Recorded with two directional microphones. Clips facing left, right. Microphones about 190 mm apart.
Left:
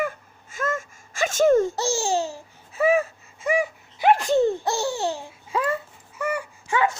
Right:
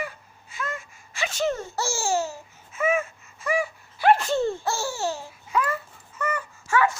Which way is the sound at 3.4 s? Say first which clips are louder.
Left 3 dB; 20° left (ahead or behind).